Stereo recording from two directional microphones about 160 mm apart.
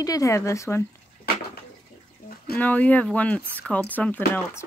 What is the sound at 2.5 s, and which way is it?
Speech, 10° left (ahead or behind).